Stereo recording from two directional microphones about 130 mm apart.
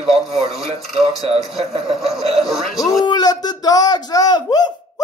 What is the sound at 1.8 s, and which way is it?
Speech, centre (ahead or behind).